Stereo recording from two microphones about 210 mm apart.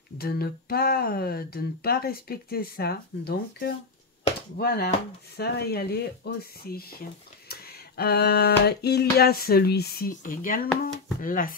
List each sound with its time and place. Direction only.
0.2 s speech: 45° left (ahead or behind)